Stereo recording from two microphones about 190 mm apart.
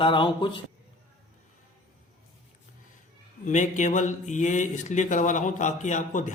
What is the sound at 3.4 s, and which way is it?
Speech, 40° left (ahead or behind).